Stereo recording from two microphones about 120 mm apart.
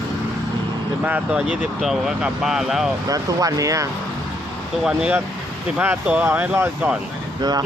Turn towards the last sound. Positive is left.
turn(degrees=-35)  # may be behind; listen again after turning